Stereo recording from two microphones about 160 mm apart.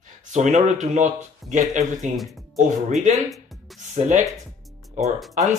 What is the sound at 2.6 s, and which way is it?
Speech, 50° right (ahead or behind).